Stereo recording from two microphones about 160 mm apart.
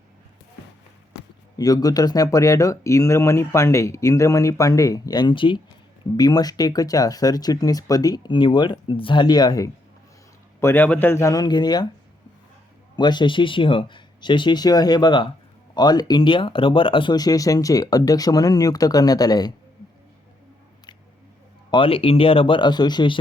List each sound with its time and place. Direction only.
1.5 s a man's voice: 25° left (ahead or behind)
13.0 s speech: 25° left (ahead or behind)
21.7 s speech: 35° left (ahead or behind)